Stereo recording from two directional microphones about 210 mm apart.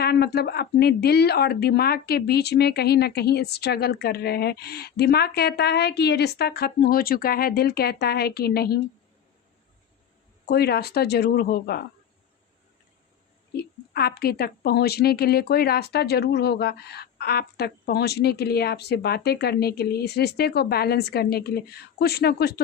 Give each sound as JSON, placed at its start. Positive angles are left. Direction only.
{"t": 0.0, "sound": "a woman's voice", "side_deg": 50}
{"t": 10.4, "sound": "a woman's voice", "side_deg": 50}
{"t": 13.5, "sound": "a woman's voice", "side_deg": 50}